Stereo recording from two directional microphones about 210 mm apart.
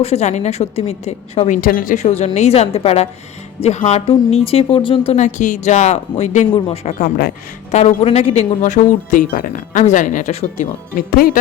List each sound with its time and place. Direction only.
0.0 s speech: 30° left (ahead or behind)
1.6 s speech: 40° left (ahead or behind)